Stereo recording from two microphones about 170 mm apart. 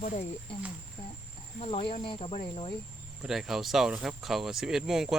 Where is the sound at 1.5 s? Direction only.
35° left (ahead or behind).